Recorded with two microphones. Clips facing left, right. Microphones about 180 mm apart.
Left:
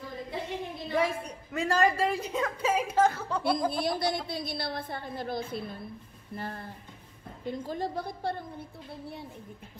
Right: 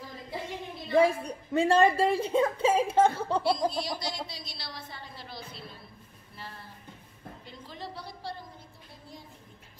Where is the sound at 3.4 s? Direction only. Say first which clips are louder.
Left 2 dB; 55° left (ahead or behind).